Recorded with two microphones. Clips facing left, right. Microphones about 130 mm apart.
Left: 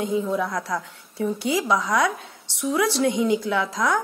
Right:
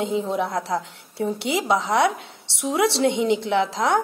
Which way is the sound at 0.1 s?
25° right (ahead or behind).